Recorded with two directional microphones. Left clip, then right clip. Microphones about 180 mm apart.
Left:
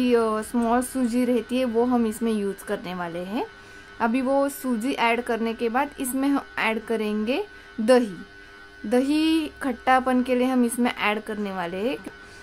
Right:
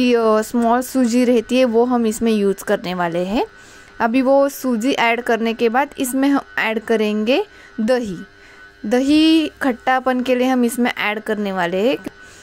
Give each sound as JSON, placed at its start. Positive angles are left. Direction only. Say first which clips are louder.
{"t": 0.0, "sound": "a woman's voice", "louder": "right 7 dB", "side_deg": -35}